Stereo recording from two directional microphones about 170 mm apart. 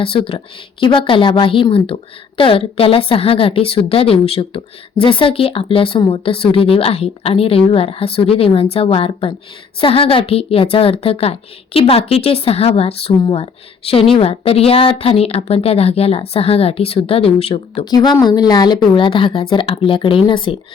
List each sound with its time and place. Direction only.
0.0 s a woman's voice: 30° left (ahead or behind)